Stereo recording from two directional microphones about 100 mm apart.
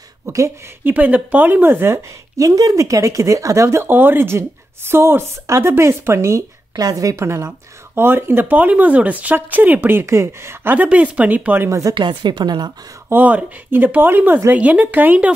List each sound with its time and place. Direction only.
0.8 s a woman's voice: 15° right (ahead or behind)
6.7 s a woman's voice: 40° right (ahead or behind); by 11.8 s 20° right (ahead or behind)
11.9 s a woman's voice: 55° right (ahead or behind)
13.1 s speech: 15° right (ahead or behind)